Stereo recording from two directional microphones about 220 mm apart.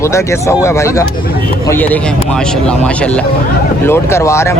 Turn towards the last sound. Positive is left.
turn(degrees=10)  # may be behind; listen again after turning